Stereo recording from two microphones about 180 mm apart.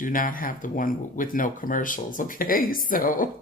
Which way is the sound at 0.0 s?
50° left (ahead or behind).